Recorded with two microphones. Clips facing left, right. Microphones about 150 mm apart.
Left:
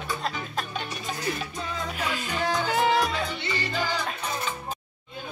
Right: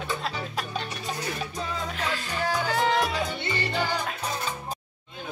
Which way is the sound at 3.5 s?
60° right (ahead or behind).